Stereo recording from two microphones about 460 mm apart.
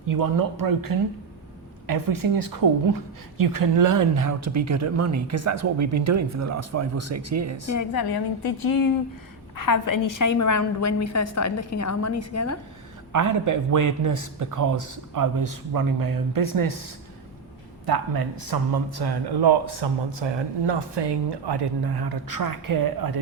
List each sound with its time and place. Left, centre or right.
0.1 s a woman's voice: right
7.8 s a woman's voice: left
13.1 s a woman's voice: right
17.8 s speech: right